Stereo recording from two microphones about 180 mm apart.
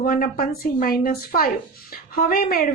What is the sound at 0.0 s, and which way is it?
A woman's voice, 55° left (ahead or behind).